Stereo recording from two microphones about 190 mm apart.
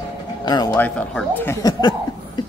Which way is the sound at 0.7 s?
10° left (ahead or behind).